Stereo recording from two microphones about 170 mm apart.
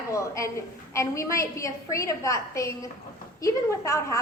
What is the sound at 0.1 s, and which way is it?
A woman's voice, 15° left (ahead or behind).